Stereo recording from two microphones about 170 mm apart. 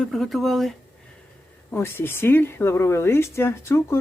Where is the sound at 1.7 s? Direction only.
15° left (ahead or behind).